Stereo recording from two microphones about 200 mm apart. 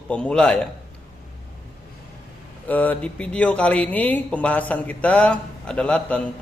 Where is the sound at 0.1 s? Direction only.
5° left (ahead or behind).